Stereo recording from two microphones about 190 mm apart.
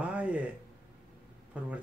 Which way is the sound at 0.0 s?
5° right (ahead or behind).